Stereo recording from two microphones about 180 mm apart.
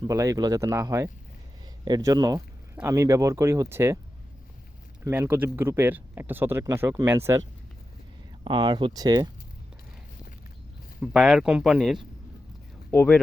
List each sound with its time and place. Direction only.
0.0 s speech: 20° right (ahead or behind)
5.0 s speech: 10° right (ahead or behind)
8.4 s speech: 25° right (ahead or behind)
11.0 s speech: 5° right (ahead or behind)
12.9 s speech: 10° left (ahead or behind)